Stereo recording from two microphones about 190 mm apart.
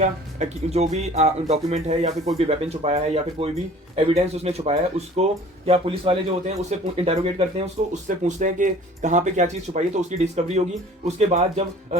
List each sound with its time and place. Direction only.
0.0 s speech: 35° right (ahead or behind)